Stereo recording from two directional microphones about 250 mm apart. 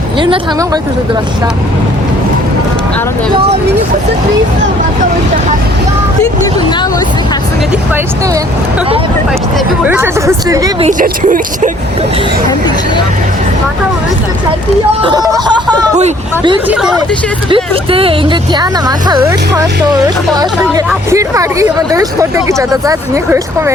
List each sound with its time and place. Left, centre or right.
0.2 s speech: centre
9.8 s speech: centre
10.8 s speech: right
15.0 s speech: centre
16.6 s speech: centre
17.5 s speech: right